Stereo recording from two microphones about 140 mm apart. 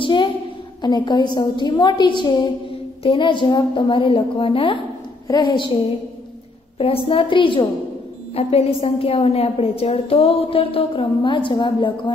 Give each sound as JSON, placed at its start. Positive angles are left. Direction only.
{"t": 0.0, "sound": "a sound", "side_deg": 35}
{"t": 0.8, "sound": "a woman's voice", "side_deg": 30}
{"t": 6.8, "sound": "a woman's voice", "side_deg": 40}